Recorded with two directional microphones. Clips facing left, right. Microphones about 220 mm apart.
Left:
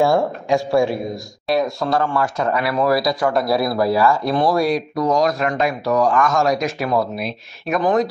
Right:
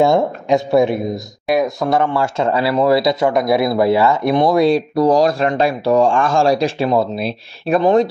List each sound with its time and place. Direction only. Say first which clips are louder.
0.0 s speech: right 3 dB; 20° right (ahead or behind)